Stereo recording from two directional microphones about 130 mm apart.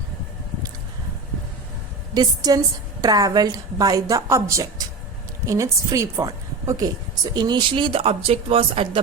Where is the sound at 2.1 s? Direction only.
30° right (ahead or behind).